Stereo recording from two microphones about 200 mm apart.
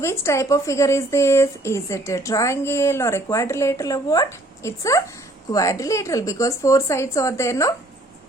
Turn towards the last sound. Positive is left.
turn(degrees=15)  # may be behind; listen again after turning